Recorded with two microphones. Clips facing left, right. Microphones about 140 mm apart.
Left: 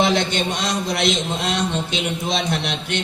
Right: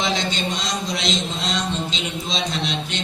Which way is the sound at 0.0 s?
60° left (ahead or behind).